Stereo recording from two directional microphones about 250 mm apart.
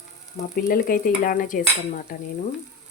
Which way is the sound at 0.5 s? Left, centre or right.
Left.